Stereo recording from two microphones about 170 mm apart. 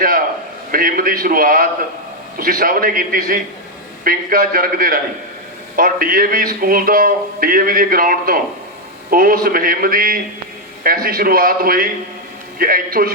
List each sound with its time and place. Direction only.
0.7 s a man's voice: 55° right (ahead or behind)